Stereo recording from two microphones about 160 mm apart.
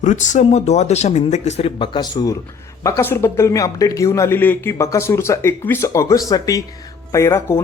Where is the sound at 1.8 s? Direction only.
25° left (ahead or behind).